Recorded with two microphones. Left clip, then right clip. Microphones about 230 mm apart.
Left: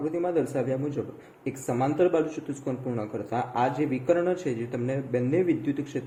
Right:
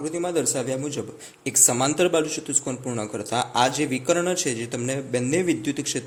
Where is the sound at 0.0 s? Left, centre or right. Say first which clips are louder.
Right 2 dB; right.